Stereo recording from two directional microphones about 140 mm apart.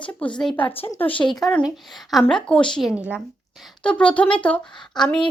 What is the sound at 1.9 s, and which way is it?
A woman's voice, centre (ahead or behind).